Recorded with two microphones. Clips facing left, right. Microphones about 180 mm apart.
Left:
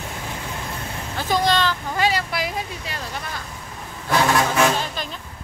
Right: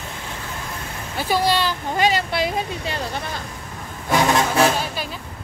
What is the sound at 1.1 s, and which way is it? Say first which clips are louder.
Speech: right 1 dB; 10° right (ahead or behind).